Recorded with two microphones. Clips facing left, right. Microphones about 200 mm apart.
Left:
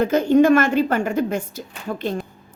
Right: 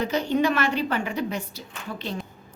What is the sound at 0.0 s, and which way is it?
A woman's voice, 50° left (ahead or behind).